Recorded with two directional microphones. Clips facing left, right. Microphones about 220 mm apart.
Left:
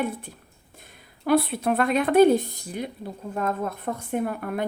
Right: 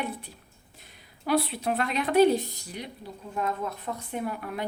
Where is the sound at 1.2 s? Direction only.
50° left (ahead or behind).